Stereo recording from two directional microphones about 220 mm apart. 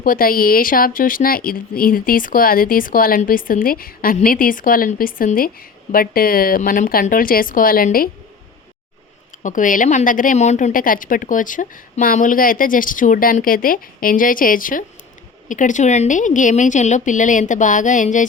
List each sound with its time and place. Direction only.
0.0 s speech: 40° left (ahead or behind)
9.4 s speech: 35° left (ahead or behind)